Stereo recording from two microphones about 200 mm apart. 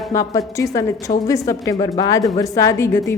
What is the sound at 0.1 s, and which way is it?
A woman's voice, 15° left (ahead or behind).